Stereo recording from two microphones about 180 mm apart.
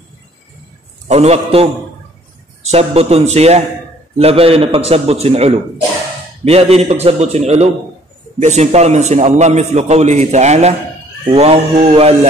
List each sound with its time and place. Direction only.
1.0 s a man's voice: 35° right (ahead or behind)